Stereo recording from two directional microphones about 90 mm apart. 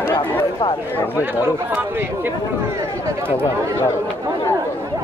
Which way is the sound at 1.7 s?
25° right (ahead or behind).